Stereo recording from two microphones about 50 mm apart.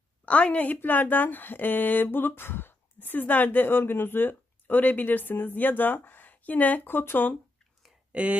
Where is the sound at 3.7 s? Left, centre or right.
Left.